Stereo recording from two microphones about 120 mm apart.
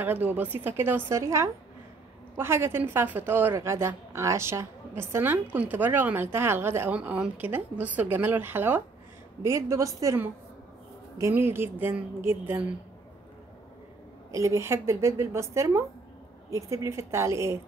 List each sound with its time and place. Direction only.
0.0 s a woman's voice: 15° right (ahead or behind)
14.3 s a woman's voice: 25° right (ahead or behind)